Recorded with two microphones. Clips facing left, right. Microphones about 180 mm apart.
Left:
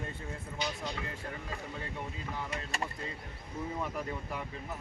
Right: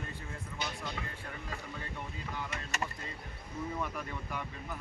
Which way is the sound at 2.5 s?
30° left (ahead or behind).